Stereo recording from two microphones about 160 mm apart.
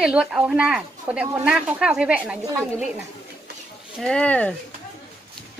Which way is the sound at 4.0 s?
5° left (ahead or behind).